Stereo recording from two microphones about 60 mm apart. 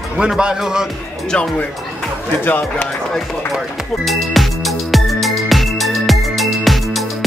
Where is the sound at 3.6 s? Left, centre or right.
Centre.